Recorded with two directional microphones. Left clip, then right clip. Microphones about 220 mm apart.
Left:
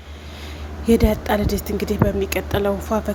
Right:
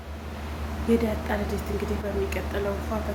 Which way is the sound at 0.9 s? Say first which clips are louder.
Left 8 dB; 45° left (ahead or behind).